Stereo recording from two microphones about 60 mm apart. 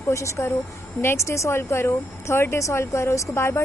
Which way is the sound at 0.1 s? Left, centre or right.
Left.